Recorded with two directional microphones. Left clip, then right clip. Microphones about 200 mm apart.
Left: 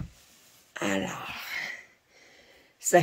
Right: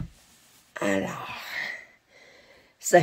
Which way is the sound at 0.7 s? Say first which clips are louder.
Right 3 dB; centre (ahead or behind).